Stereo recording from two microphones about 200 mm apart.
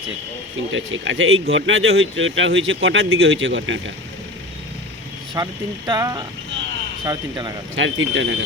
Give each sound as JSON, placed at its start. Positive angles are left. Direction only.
{"t": 0.7, "sound": "speech", "side_deg": -70}
{"t": 5.3, "sound": "speech", "side_deg": -20}
{"t": 7.8, "sound": "speech", "side_deg": -70}